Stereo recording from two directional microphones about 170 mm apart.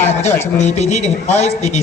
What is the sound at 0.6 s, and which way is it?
Speech, 40° left (ahead or behind).